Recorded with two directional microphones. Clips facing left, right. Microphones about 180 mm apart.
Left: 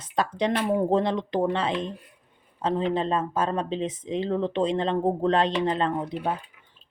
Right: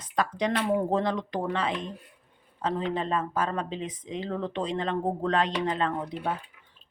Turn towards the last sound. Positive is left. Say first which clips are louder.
# left 3 dB
turn(degrees=30)  # may be behind; listen again after turning